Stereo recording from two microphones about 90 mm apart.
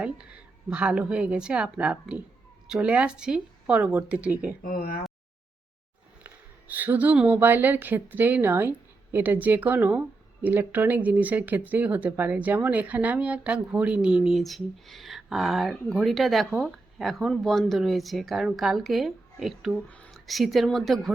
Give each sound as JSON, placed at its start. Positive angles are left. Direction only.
{"t": 0.0, "sound": "a woman's voice", "side_deg": -10}
{"t": 6.2, "sound": "a woman's voice", "side_deg": -20}